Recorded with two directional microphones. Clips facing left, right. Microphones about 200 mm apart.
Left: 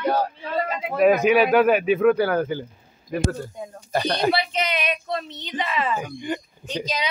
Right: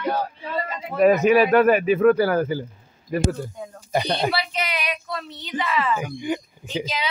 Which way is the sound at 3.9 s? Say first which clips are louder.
Even; 15° right (ahead or behind).